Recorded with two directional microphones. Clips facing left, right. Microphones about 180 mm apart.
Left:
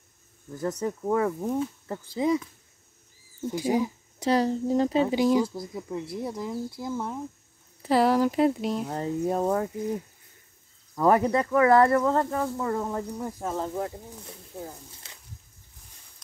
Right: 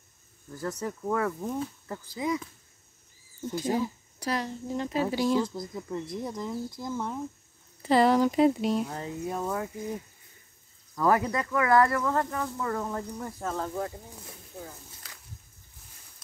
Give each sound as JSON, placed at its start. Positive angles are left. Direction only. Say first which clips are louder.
{"t": 0.6, "sound": "speech", "louder": "left 4 dB", "side_deg": 20}
{"t": 3.4, "sound": "speech", "louder": "left 3 dB", "side_deg": 10}
{"t": 4.3, "sound": "speech", "louder": "left 8 dB", "side_deg": 35}
{"t": 5.1, "sound": "speech", "louder": "left 4 dB", "side_deg": 15}
{"t": 8.8, "sound": "speech", "louder": "left 6 dB", "side_deg": 40}
{"t": 11.0, "sound": "speech", "louder": "left 4 dB", "side_deg": 25}